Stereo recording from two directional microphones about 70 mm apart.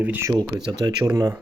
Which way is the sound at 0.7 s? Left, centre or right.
Right.